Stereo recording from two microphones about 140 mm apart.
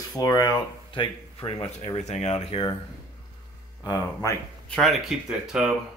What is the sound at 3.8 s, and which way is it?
Speech, 25° left (ahead or behind).